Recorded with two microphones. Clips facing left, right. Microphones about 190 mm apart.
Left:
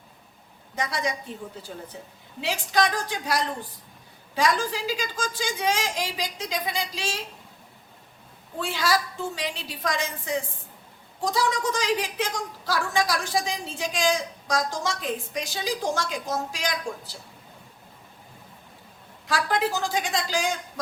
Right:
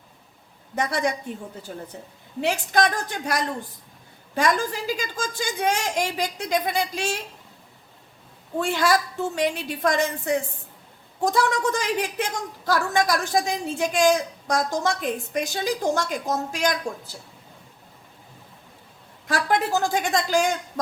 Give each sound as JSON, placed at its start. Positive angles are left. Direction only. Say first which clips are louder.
{"t": 0.8, "sound": "a woman's voice", "louder": "right 4 dB", "side_deg": -55}
{"t": 2.4, "sound": "a woman's voice", "louder": "right 3 dB", "side_deg": -50}
{"t": 8.5, "sound": "a woman's voice", "louder": "right 4 dB", "side_deg": -55}
{"t": 19.3, "sound": "a woman's voice", "louder": "right 3 dB", "side_deg": -55}